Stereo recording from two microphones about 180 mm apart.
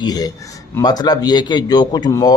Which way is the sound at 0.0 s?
20° left (ahead or behind).